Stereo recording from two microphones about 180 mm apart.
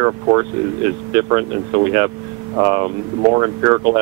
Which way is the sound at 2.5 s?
25° right (ahead or behind).